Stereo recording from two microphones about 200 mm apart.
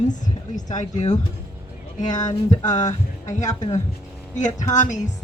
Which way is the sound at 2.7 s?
40° left (ahead or behind).